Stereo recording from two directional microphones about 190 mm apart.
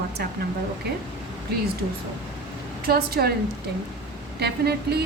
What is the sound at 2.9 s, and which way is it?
Speech, 55° right (ahead or behind).